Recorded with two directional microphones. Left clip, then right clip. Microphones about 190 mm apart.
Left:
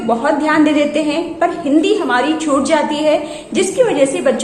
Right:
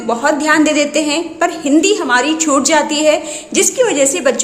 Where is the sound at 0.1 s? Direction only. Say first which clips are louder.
Right 1 dB; 30° right (ahead or behind).